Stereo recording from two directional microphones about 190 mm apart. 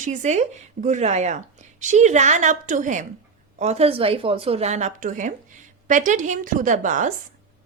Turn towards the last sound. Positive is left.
turn(degrees=-40)  # may be behind; listen again after turning